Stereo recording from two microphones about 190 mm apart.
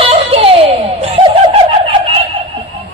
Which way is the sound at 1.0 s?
30° right (ahead or behind).